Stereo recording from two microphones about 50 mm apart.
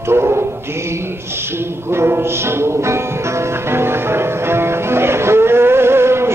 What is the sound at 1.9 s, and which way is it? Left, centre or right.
Music, right.